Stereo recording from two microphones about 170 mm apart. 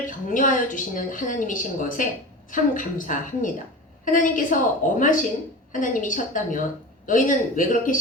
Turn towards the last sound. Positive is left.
turn(degrees=50)  # may be behind; listen again after turning